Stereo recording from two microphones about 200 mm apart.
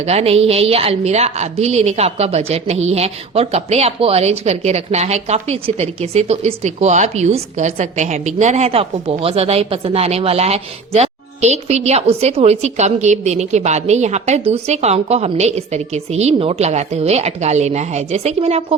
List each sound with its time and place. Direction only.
0.0 s a woman's voice: 30° right (ahead or behind)